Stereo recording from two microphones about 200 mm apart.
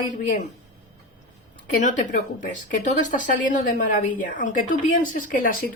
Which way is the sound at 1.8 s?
40° left (ahead or behind).